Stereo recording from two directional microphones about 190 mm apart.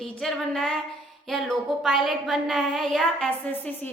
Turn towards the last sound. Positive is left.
turn(degrees=10)  # may be behind; listen again after turning